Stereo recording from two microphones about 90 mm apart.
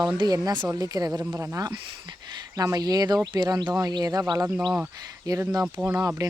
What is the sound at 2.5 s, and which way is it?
Speech, 40° right (ahead or behind).